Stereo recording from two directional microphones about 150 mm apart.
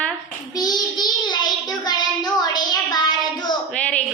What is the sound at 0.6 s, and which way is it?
Child singing, 25° left (ahead or behind).